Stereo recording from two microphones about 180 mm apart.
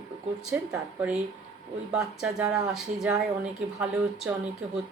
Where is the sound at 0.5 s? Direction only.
10° right (ahead or behind).